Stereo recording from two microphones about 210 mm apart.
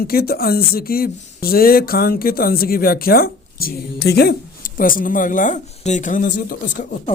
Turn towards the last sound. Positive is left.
turn(degrees=40)  # may be behind; listen again after turning